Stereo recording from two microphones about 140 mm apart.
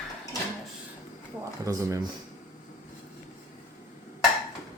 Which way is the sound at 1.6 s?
25° right (ahead or behind).